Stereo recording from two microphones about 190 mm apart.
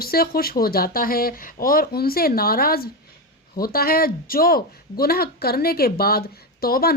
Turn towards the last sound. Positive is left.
turn(degrees=55)  # may be behind; listen again after turning